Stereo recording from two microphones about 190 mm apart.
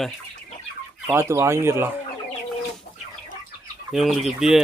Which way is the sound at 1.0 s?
15° right (ahead or behind).